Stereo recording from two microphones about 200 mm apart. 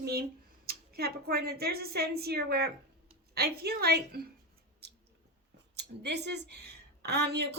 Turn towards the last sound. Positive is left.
turn(degrees=-55)  # may be behind; listen again after turning